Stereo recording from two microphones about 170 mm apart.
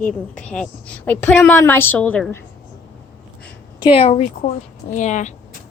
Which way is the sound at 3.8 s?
35° left (ahead or behind).